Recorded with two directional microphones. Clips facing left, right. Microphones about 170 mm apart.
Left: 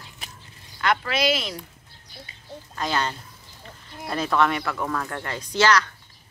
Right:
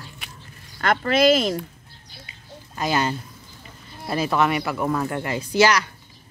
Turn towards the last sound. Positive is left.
turn(degrees=-10)  # may be behind; listen again after turning